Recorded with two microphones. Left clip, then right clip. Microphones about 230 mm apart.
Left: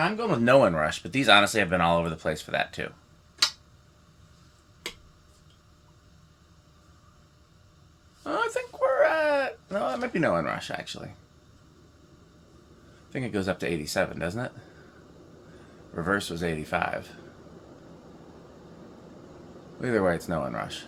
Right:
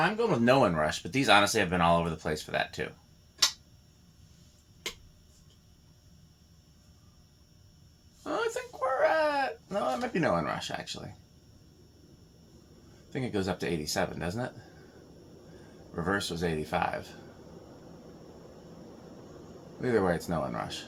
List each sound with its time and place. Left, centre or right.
0.2 s speech: left
8.2 s a sound: left
13.1 s speech: left
16.0 s speech: left
19.8 s speech: left